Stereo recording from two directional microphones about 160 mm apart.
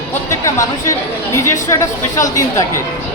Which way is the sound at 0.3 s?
20° left (ahead or behind).